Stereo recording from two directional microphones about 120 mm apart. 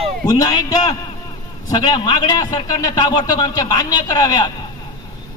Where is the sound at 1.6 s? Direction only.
35° left (ahead or behind).